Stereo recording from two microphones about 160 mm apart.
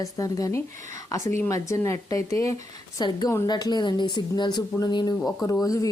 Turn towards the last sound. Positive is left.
turn(degrees=20)  # may be behind; listen again after turning